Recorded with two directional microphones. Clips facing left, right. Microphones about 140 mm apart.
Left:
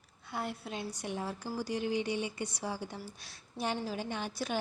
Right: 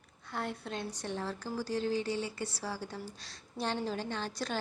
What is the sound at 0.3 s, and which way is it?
A woman's voice, 10° left (ahead or behind).